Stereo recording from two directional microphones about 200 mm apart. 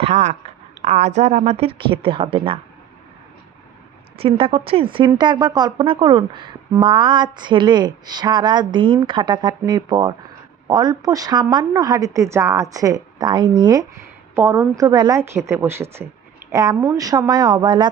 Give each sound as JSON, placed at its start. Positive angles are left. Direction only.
{"t": 0.0, "sound": "speech", "side_deg": -35}
{"t": 4.2, "sound": "a woman's voice", "side_deg": -30}